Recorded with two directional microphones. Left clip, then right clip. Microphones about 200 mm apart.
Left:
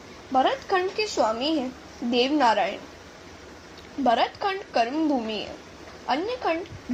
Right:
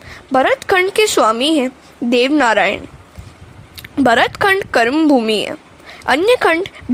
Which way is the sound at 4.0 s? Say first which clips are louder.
Right 10 dB; 50° right (ahead or behind).